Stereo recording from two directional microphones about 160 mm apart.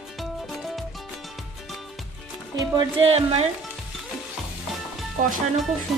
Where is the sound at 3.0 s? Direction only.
40° right (ahead or behind).